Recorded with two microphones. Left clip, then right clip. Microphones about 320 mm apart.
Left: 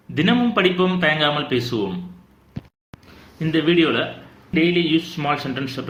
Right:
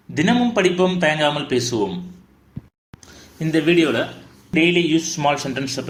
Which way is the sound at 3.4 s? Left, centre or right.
Right.